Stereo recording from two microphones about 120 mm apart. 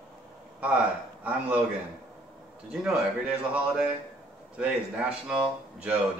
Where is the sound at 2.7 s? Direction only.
5° right (ahead or behind).